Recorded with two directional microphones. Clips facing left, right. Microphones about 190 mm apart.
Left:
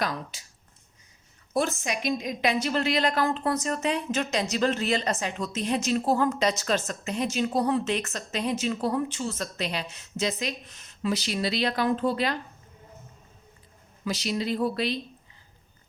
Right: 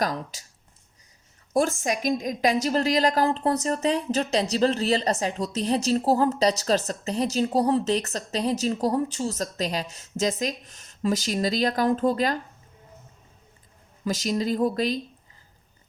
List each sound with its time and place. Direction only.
0.0 s a woman's voice: 40° right (ahead or behind)
1.5 s a woman's voice: 45° right (ahead or behind)
14.0 s speech: 45° right (ahead or behind)